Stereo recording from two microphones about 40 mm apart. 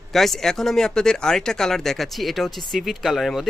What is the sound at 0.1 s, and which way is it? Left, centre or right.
Speech, centre.